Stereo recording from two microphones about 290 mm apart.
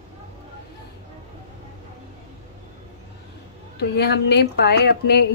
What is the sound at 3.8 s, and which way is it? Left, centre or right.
A woman's voice, left.